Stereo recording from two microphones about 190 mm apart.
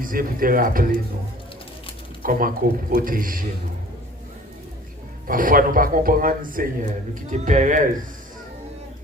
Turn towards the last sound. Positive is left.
turn(degrees=-40)  # may be behind; listen again after turning